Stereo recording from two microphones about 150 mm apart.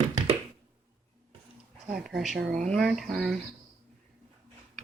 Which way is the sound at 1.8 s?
5° right (ahead or behind).